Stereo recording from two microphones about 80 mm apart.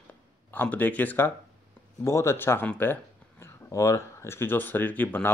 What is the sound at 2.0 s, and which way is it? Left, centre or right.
Speech, left.